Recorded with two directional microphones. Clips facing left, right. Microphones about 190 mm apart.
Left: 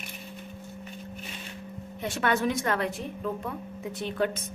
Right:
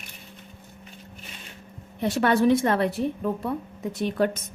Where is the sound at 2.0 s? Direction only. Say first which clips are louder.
Right 6 dB; 35° right (ahead or behind).